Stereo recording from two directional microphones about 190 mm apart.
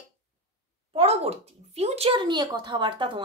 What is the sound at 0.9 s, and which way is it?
Speech, 35° right (ahead or behind).